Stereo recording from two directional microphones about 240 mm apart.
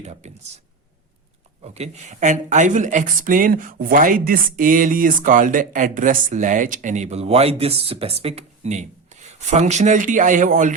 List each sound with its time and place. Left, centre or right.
0.0 s speech: right
1.6 s speech: right